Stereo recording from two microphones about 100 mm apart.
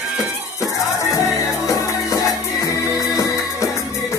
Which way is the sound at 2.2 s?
35° left (ahead or behind).